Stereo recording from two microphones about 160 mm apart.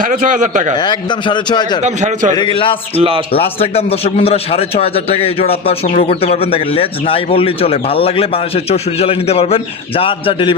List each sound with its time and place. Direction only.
0.0 s a man's voice: 55° right (ahead or behind)
0.8 s a man's voice: 30° left (ahead or behind)
1.8 s a man's voice: 50° right (ahead or behind)
2.6 s speech: 35° left (ahead or behind)